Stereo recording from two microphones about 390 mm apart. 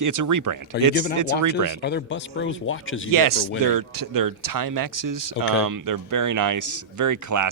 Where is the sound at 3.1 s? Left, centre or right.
Right.